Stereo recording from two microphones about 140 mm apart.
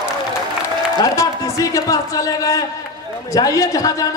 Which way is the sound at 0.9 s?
25° left (ahead or behind).